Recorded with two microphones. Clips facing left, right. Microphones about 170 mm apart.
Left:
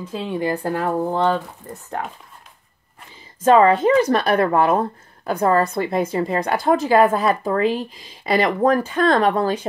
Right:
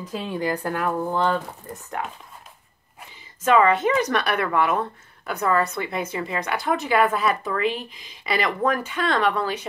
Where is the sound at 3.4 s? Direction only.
35° left (ahead or behind).